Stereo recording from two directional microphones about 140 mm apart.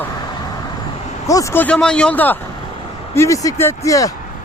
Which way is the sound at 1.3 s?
25° left (ahead or behind).